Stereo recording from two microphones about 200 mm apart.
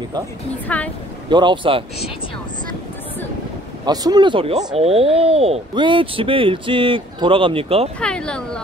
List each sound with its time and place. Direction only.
0.7 s a woman's voice: 5° left (ahead or behind)
1.3 s speech: 25° right (ahead or behind)
3.8 s speech: 20° right (ahead or behind)
8.0 s speech: 5° left (ahead or behind)